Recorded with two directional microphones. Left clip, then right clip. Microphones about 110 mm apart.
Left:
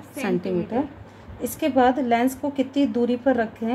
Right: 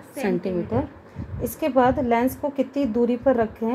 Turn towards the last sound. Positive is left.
turn(degrees=-50)  # may be behind; listen again after turning